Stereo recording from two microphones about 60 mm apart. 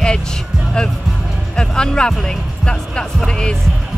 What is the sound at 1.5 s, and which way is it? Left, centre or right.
Speech, centre.